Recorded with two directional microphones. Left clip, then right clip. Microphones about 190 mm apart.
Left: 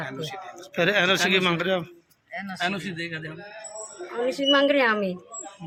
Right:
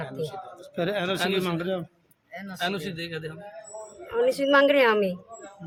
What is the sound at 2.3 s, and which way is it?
Speech, 65° right (ahead or behind).